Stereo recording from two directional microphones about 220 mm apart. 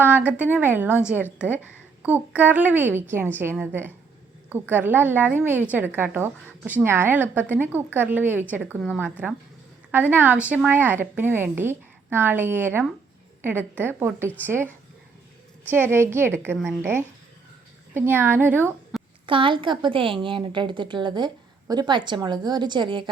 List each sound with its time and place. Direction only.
0.0 s a woman's voice: 10° right (ahead or behind)
15.7 s a woman's voice: 10° right (ahead or behind)
19.2 s a woman's voice: 25° right (ahead or behind)